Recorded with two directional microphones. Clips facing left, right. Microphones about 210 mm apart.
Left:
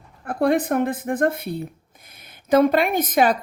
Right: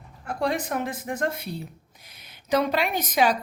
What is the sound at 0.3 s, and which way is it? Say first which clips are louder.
A woman's voice: left 7 dB; 55° left (ahead or behind).